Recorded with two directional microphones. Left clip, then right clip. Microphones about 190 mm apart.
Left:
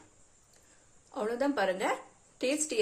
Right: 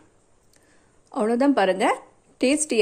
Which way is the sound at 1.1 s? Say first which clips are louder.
Right 10 dB; 40° right (ahead or behind).